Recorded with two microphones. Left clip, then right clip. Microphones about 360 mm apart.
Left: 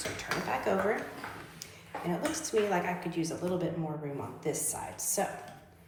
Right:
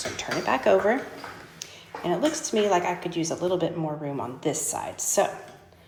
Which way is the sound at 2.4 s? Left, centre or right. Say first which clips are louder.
Right 7 dB; right.